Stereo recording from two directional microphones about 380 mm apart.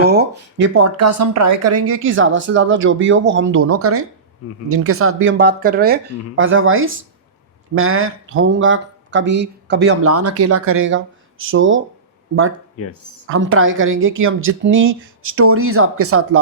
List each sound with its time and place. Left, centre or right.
0.0 s speech: right
12.8 s speech: left
13.2 s speech: right